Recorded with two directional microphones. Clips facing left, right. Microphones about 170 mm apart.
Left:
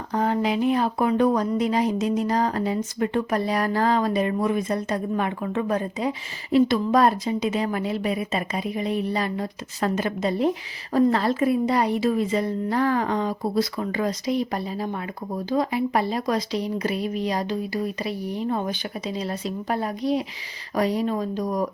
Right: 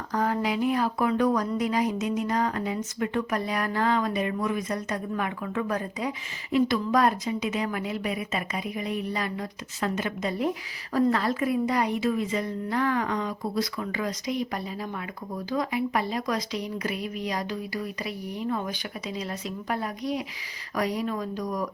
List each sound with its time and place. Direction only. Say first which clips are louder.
0.1 s speech: left 4 dB; 25° left (ahead or behind)